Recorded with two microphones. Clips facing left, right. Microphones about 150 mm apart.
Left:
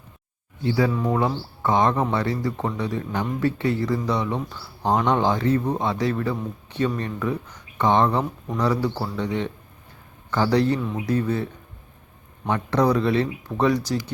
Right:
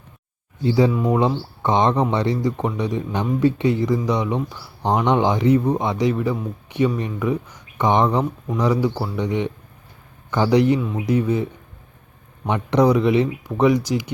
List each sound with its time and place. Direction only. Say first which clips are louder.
0.6 s speech: right 4 dB; 20° right (ahead or behind)
12.5 s speech: right 4 dB; 15° right (ahead or behind)